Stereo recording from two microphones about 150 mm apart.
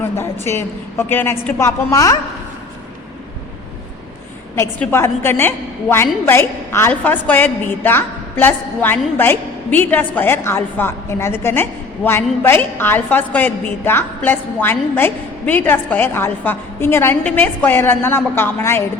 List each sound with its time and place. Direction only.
0.4 s a woman's voice: 15° left (ahead or behind)
4.5 s a woman's voice: 15° left (ahead or behind)